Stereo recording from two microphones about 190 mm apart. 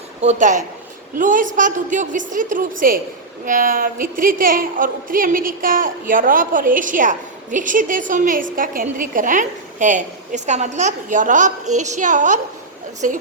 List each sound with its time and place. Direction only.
0.2 s a woman's voice: 40° right (ahead or behind)